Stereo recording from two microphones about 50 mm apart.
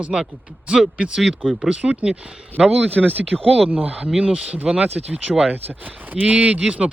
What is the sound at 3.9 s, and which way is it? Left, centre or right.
Speech, centre.